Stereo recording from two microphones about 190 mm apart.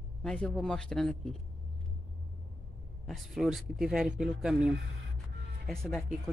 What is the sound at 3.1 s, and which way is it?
Speech, centre (ahead or behind).